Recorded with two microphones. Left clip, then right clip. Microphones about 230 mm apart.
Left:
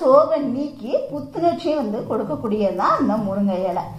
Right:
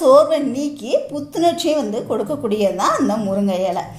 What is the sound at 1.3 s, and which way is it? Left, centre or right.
Speech, right.